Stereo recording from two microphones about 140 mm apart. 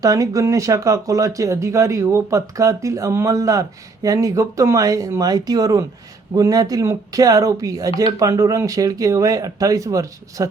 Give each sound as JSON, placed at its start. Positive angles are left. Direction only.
{"t": 0.0, "sound": "speech", "side_deg": -25}